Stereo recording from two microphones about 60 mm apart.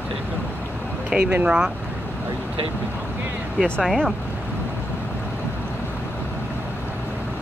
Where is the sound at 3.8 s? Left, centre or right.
Centre.